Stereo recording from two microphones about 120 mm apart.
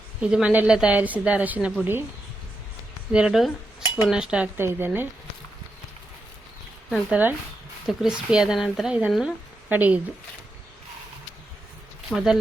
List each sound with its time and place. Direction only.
0.2 s speech: 10° right (ahead or behind)
3.1 s cutlery: 5° right (ahead or behind)
4.5 s speech: 20° right (ahead or behind)
7.1 s speech: 15° right (ahead or behind)
12.1 s speech: 5° right (ahead or behind)